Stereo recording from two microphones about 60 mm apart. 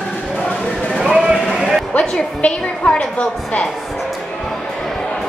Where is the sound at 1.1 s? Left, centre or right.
Centre.